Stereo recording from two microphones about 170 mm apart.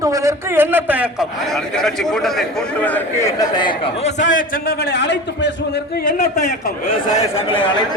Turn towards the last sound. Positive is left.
turn(degrees=30)  # may be behind; listen again after turning